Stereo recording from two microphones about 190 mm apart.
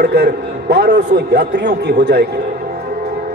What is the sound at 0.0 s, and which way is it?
A man's voice, 60° right (ahead or behind).